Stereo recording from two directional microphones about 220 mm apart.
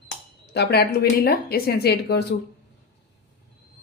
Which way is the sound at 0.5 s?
50° left (ahead or behind).